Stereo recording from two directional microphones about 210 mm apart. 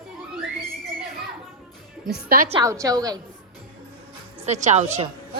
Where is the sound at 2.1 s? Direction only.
45° right (ahead or behind).